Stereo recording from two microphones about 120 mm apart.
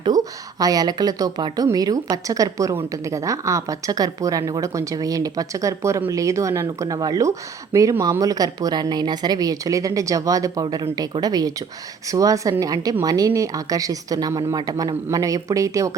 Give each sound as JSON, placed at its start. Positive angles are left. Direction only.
{"t": 0.6, "sound": "speech", "side_deg": -30}